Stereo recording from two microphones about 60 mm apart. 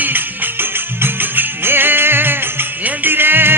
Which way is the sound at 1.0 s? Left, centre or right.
Right.